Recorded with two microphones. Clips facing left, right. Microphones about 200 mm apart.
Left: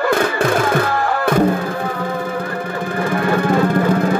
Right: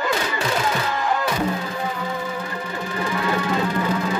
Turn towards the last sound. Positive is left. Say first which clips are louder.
# left 7 dB
turn(degrees=55)  # may be behind; listen again after turning